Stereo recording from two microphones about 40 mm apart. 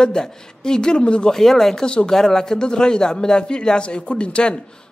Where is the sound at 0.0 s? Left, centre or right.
Centre.